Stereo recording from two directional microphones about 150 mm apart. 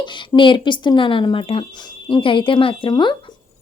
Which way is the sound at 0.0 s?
30° left (ahead or behind).